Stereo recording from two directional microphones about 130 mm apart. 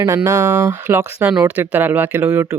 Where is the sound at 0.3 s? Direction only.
25° right (ahead or behind).